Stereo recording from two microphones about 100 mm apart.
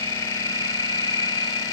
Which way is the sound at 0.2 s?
30° left (ahead or behind).